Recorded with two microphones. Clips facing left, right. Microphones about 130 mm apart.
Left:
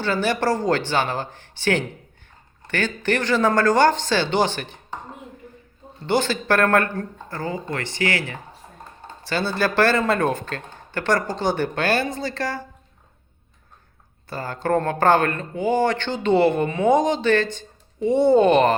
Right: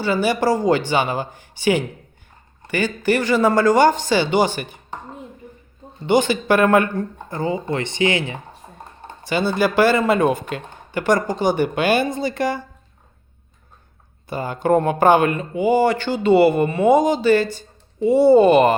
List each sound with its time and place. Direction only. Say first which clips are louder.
0.0 s speech: right 3 dB; 10° right (ahead or behind)
6.1 s speech: right 4 dB; 15° right (ahead or behind)
14.3 s speech: right 5 dB; 15° right (ahead or behind)